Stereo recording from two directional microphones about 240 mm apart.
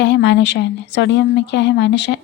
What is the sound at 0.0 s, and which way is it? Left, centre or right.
Speech, left.